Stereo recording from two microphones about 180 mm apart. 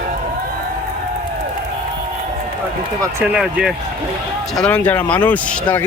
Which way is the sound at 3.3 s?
5° right (ahead or behind).